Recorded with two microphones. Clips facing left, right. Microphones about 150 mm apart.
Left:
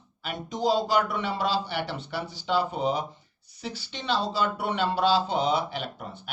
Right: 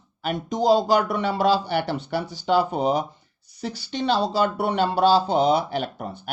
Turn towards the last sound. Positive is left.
turn(degrees=-45)  # may be behind; listen again after turning